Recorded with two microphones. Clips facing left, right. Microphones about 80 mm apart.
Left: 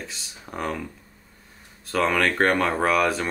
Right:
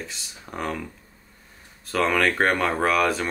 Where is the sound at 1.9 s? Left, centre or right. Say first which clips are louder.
Even; centre.